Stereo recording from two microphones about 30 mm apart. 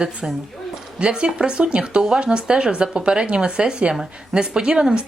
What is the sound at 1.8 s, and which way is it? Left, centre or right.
Speech, right.